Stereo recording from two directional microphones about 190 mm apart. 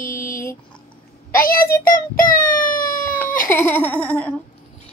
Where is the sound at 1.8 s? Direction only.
45° left (ahead or behind).